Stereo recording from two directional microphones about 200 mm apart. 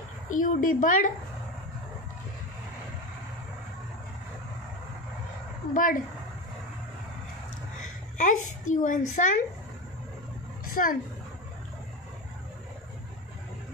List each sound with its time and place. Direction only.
0.3 s a child's voice: 40° left (ahead or behind)
5.7 s a child's voice: 40° left (ahead or behind)
8.2 s a child's voice: 40° left (ahead or behind)
10.7 s a woman's voice: 45° left (ahead or behind)